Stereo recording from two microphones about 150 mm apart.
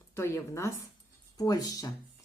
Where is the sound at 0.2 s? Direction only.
20° left (ahead or behind).